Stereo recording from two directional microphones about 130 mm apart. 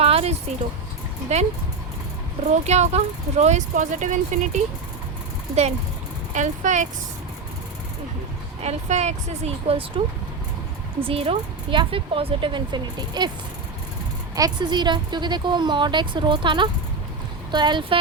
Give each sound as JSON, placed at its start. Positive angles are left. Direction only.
{"t": 0.0, "sound": "a sound", "side_deg": -50}
{"t": 1.3, "sound": "speech", "side_deg": -60}
{"t": 2.5, "sound": "speech", "side_deg": -60}
{"t": 6.3, "sound": "speech", "side_deg": -70}
{"t": 8.6, "sound": "speech", "side_deg": -60}
{"t": 11.0, "sound": "speech", "side_deg": -45}
{"t": 14.3, "sound": "speech", "side_deg": -30}